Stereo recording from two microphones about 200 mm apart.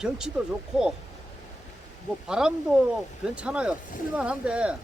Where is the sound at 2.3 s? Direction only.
5° right (ahead or behind).